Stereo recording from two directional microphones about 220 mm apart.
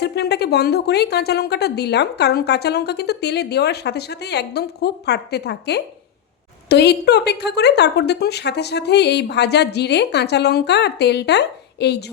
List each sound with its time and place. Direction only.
0.0 s speech: 50° left (ahead or behind)